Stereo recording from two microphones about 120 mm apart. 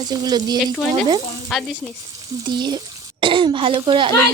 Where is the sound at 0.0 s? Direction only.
35° right (ahead or behind).